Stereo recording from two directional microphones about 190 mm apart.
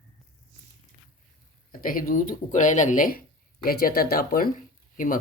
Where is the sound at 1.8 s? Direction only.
45° left (ahead or behind).